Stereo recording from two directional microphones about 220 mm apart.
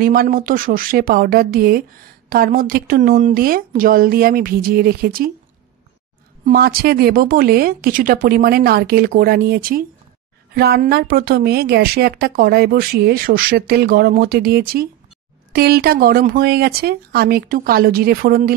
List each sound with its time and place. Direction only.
0.0 s a woman's voice: 40° right (ahead or behind)
6.4 s a woman's voice: 45° right (ahead or behind)